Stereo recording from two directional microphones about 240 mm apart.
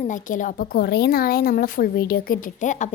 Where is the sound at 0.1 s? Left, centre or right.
Left.